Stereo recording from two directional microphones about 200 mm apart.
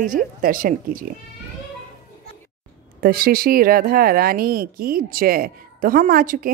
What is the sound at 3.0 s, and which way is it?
Speech, 45° right (ahead or behind).